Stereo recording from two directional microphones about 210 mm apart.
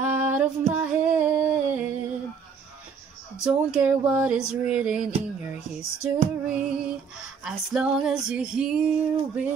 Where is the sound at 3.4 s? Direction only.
5° right (ahead or behind).